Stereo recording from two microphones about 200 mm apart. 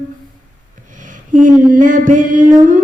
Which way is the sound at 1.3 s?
40° right (ahead or behind).